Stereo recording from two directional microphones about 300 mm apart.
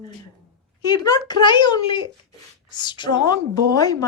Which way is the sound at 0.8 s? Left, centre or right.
Centre.